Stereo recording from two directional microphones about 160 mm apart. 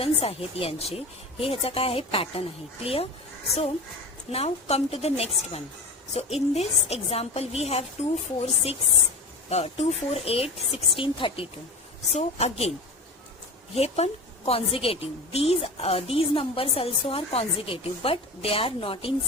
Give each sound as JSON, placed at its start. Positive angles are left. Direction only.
{"t": 0.0, "sound": "a woman's voice", "side_deg": 35}
{"t": 4.3, "sound": "a woman's voice", "side_deg": 40}
{"t": 13.7, "sound": "a woman's voice", "side_deg": 40}